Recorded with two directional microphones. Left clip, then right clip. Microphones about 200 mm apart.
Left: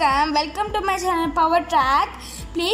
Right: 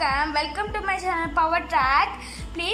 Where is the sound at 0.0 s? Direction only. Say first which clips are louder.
Left 5 dB; 15° left (ahead or behind).